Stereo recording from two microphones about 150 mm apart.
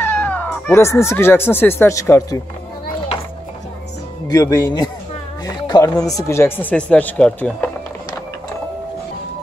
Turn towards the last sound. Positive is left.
turn(degrees=10)  # may be behind; listen again after turning